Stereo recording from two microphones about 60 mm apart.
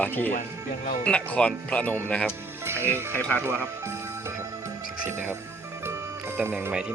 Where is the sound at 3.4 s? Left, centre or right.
Right.